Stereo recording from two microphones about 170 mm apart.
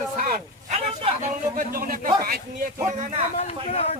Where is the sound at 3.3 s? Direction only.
35° left (ahead or behind).